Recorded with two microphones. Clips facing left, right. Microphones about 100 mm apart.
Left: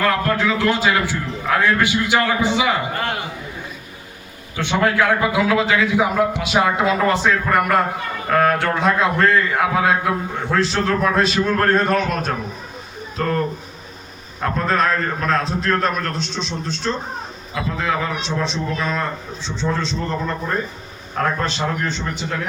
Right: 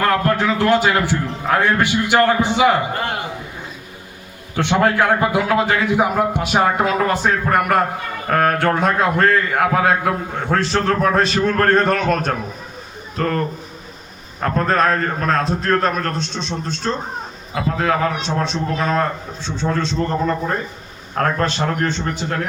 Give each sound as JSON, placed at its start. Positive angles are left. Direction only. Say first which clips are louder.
{"t": 0.1, "sound": "a man's voice", "louder": "right 2 dB", "side_deg": -45}
{"t": 4.5, "sound": "a man's voice", "louder": "right 2 dB", "side_deg": -55}
{"t": 14.4, "sound": "a man's voice", "louder": "right 2 dB", "side_deg": -45}
{"t": 21.2, "sound": "a man's voice", "louder": "right 2 dB", "side_deg": -50}